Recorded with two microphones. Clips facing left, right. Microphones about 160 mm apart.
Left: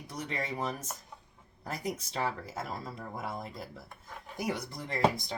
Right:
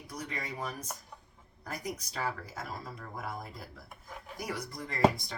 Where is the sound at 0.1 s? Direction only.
25° left (ahead or behind).